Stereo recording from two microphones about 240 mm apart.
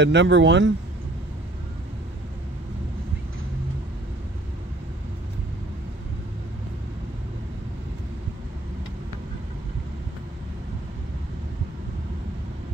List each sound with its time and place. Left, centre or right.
0.0 s a man's voice: right